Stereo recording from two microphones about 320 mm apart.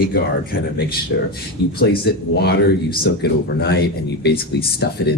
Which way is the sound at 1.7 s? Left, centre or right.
Left.